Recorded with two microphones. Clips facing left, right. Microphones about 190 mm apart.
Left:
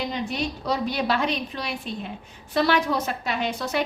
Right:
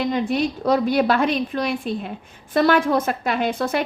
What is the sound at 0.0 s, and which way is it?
A woman's voice, 55° right (ahead or behind).